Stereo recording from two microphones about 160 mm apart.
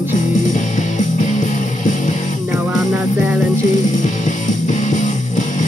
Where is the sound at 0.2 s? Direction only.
50° left (ahead or behind).